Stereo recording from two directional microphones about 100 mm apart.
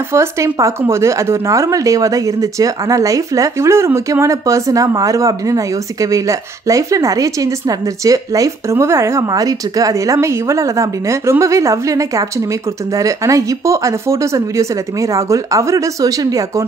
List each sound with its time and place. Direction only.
0.1 s speech: 30° right (ahead or behind)